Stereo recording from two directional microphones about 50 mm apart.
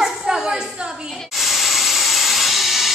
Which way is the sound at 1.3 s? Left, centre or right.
Centre.